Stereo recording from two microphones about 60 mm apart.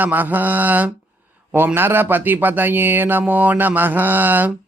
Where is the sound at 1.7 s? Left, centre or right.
Right.